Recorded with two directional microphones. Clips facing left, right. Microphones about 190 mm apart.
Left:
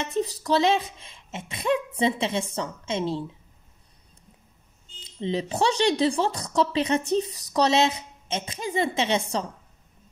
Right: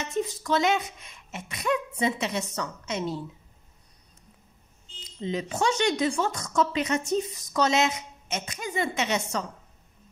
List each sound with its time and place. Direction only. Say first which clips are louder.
0.0 s speech: left 2 dB; 35° left (ahead or behind)
5.0 s speech: left 3 dB; 30° left (ahead or behind)